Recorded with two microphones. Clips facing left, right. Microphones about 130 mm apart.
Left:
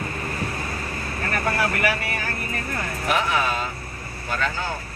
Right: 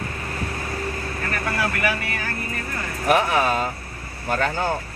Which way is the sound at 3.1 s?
45° right (ahead or behind).